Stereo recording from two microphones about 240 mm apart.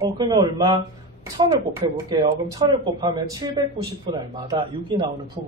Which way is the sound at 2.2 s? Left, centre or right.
Centre.